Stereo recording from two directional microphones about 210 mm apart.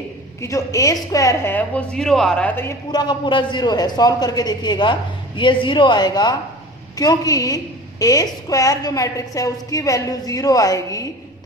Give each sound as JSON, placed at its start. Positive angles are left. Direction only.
{"t": 0.4, "sound": "a woman's voice", "side_deg": 15}